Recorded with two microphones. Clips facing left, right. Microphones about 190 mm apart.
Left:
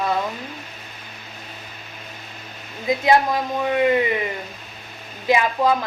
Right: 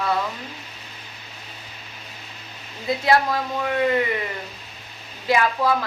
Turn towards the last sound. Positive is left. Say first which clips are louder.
# left 2 dB
turn(degrees=20)  # may be behind; listen again after turning